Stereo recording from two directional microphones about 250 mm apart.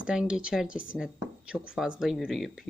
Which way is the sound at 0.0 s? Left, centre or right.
Centre.